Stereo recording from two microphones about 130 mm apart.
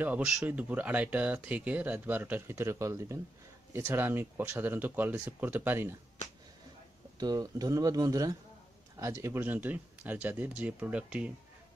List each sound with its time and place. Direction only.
0.0 s speech: 5° right (ahead or behind)
7.2 s speech: 30° right (ahead or behind); by 11.3 s 10° right (ahead or behind)